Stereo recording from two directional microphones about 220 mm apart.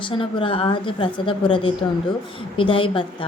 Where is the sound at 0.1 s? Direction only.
25° left (ahead or behind).